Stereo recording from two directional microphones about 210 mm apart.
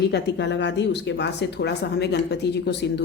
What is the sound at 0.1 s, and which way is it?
Speech, 55° left (ahead or behind).